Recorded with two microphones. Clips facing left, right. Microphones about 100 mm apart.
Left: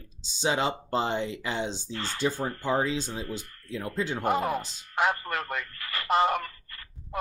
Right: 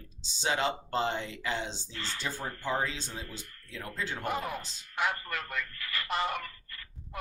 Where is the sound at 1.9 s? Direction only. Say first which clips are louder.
Left 5 dB; 50° left (ahead or behind).